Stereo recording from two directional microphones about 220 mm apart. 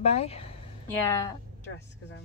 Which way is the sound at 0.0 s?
30° left (ahead or behind).